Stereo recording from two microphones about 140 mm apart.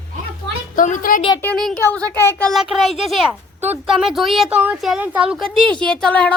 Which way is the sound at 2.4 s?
Centre (ahead or behind).